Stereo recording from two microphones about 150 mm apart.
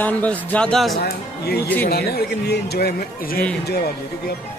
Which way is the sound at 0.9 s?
90° left.